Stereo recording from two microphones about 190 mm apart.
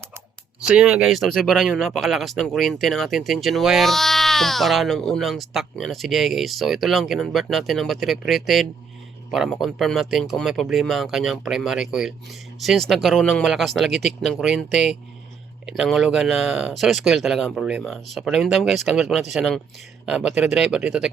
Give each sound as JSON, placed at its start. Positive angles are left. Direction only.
{"t": 0.7, "sound": "speech", "side_deg": -5}